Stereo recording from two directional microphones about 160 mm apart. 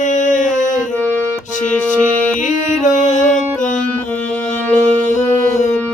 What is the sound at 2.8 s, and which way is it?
Music, 50° left (ahead or behind).